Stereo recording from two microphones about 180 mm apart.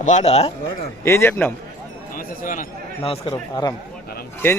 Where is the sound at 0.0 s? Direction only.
40° left (ahead or behind).